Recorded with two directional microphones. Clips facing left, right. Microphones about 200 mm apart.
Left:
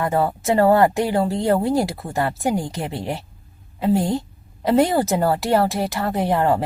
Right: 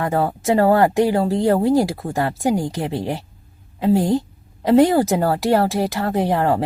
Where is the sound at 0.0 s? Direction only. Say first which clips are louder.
Right 1 dB; 10° right (ahead or behind).